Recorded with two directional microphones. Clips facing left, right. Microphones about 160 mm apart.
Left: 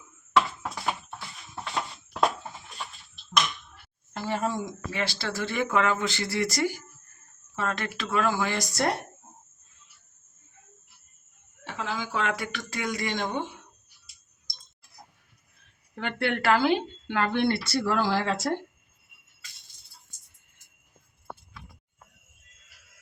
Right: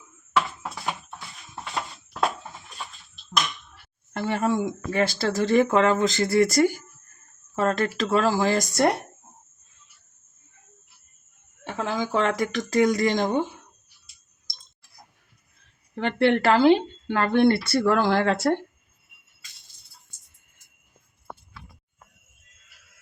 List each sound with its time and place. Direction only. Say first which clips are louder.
4.1 s speech: right 5 dB; 60° right (ahead or behind); by 8.5 s 35° right (ahead or behind)
8.5 s speech: right 6 dB; 50° right (ahead or behind)
11.6 s speech: right 6 dB; 45° right (ahead or behind)
16.0 s speech: right 8 dB; 30° right (ahead or behind); by 18.5 s 60° right (ahead or behind)